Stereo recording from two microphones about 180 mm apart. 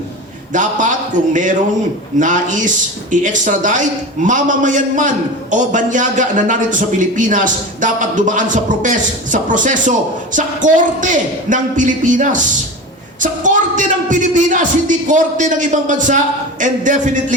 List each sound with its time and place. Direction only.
0.5 s a man's voice: 45° right (ahead or behind)
13.4 s a man's voice: 45° right (ahead or behind)